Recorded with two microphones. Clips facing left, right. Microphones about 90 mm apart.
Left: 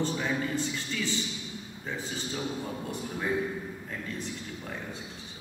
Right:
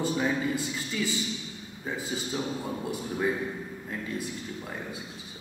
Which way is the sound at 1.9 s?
10° right (ahead or behind).